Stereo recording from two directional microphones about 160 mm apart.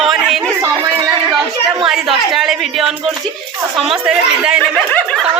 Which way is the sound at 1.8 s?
Centre (ahead or behind).